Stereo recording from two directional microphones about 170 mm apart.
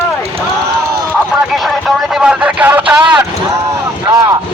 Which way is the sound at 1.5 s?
Centre (ahead or behind).